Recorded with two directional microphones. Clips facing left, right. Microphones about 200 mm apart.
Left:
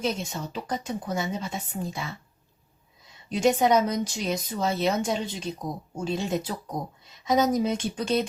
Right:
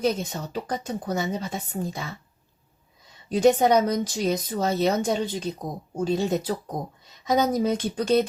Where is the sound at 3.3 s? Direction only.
35° right (ahead or behind).